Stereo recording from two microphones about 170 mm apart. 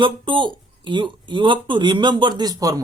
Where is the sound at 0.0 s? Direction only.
30° right (ahead or behind).